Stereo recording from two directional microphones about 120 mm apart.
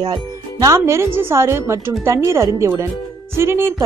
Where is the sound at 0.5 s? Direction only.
25° right (ahead or behind).